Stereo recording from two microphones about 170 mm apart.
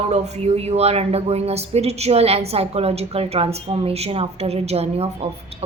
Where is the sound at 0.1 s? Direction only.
40° right (ahead or behind).